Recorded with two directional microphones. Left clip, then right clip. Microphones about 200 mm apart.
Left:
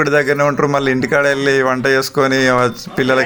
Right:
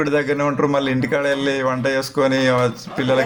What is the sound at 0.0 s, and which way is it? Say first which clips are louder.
A man's voice: left 5 dB; 40° left (ahead or behind).